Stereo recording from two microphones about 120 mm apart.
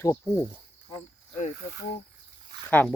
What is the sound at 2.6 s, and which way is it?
Speech, 10° left (ahead or behind).